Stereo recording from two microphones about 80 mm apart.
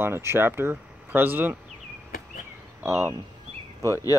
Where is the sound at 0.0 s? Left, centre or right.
Right.